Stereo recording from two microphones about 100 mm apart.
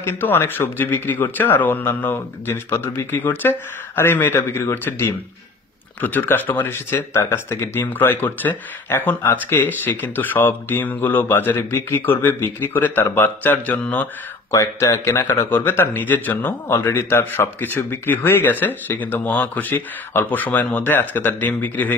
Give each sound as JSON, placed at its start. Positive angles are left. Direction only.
{"t": 0.0, "sound": "speech", "side_deg": 20}
{"t": 14.5, "sound": "speech", "side_deg": 30}